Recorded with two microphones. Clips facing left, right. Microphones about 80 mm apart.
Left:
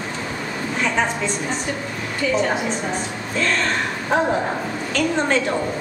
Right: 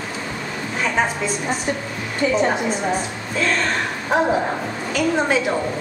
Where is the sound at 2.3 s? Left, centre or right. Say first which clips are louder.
Right 1 dB; right.